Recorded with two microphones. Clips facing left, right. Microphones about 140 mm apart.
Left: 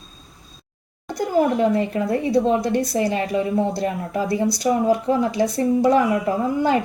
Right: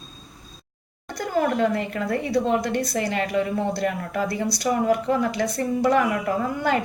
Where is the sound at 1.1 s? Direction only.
20° left (ahead or behind).